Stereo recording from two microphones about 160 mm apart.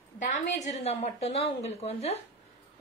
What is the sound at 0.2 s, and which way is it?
A woman's voice, 45° left (ahead or behind).